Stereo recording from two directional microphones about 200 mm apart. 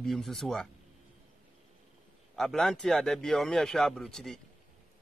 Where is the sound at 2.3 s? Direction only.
Centre (ahead or behind).